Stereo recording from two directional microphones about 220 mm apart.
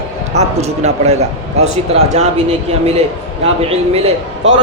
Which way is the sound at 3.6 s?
25° right (ahead or behind).